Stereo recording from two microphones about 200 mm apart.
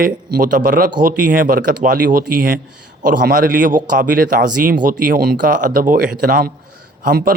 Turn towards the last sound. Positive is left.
turn(degrees=-50)  # may be behind; listen again after turning